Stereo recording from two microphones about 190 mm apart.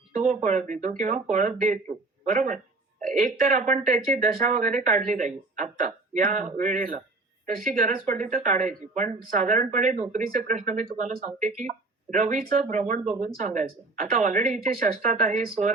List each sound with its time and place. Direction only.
0.1 s speech: 45° right (ahead or behind)